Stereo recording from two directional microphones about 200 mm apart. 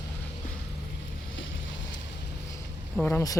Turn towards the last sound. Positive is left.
turn(degrees=15)  # may be behind; listen again after turning